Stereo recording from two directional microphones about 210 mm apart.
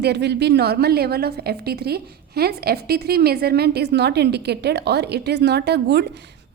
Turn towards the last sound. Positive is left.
turn(degrees=-50)  # may be behind; listen again after turning